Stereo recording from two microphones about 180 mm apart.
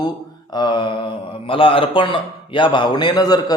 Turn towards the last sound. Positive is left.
turn(degrees=20)  # may be behind; listen again after turning